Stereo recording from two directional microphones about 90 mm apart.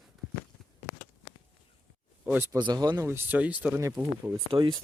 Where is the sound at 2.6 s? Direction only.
55° right (ahead or behind).